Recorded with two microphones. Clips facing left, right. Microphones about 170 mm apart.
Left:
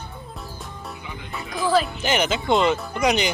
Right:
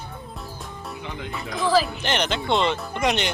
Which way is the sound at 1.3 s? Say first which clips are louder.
Even; centre (ahead or behind).